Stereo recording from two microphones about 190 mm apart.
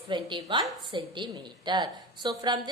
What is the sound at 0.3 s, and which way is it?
A woman's voice, 25° right (ahead or behind).